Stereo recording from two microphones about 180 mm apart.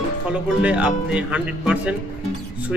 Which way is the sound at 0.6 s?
5° right (ahead or behind).